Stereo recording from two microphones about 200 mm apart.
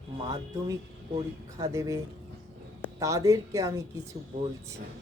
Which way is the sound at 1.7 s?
15° right (ahead or behind).